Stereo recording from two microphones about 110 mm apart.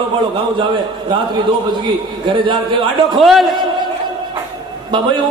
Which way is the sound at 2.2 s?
50° right (ahead or behind).